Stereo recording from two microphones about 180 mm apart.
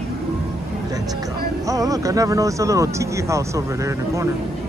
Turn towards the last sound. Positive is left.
turn(degrees=-15)  # may be behind; listen again after turning